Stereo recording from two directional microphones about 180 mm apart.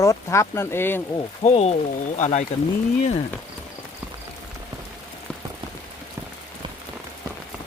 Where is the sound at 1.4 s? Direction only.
35° left (ahead or behind).